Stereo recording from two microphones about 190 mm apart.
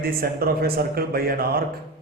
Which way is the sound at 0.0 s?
50° right (ahead or behind).